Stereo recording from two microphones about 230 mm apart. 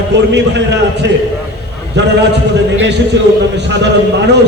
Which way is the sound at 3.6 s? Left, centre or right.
Right.